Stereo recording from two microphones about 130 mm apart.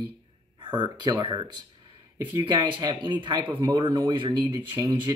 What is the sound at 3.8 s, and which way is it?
Speech, 40° right (ahead or behind).